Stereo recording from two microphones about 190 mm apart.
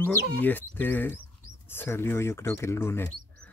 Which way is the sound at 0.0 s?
10° left (ahead or behind).